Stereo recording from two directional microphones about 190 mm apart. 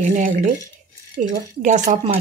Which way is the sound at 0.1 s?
45° right (ahead or behind).